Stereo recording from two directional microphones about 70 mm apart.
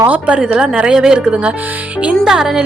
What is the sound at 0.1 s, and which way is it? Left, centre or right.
A woman's voice, centre.